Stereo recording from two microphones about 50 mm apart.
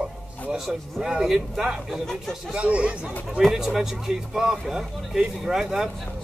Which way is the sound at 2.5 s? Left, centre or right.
Right.